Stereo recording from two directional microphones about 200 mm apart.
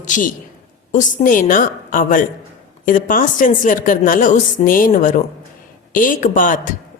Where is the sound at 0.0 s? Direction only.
40° left (ahead or behind).